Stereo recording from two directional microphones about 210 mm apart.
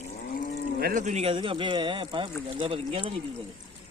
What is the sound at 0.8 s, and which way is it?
Speech, 40° right (ahead or behind).